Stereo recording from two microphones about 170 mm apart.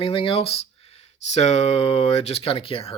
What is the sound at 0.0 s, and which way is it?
Speech, 30° left (ahead or behind).